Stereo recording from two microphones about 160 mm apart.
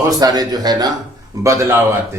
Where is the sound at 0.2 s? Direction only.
25° right (ahead or behind).